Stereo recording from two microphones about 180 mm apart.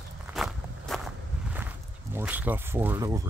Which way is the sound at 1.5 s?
10° right (ahead or behind).